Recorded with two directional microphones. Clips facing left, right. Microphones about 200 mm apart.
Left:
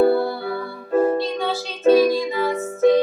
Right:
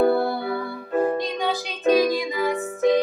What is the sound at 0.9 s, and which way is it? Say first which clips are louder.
Music: left 4 dB; 40° left (ahead or behind).